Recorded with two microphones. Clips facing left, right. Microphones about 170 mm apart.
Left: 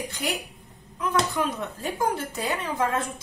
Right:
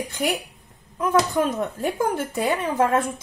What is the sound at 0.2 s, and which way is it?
Speech, 50° right (ahead or behind).